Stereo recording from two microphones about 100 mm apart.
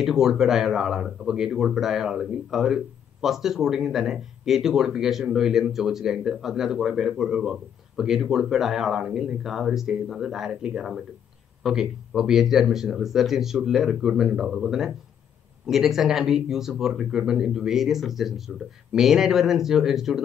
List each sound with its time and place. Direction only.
0.0 s speech: centre (ahead or behind)